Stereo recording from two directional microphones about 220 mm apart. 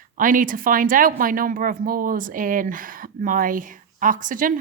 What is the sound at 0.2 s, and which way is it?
Speech, 40° right (ahead or behind).